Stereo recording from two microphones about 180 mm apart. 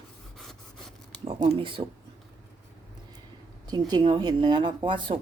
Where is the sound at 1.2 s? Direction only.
35° right (ahead or behind).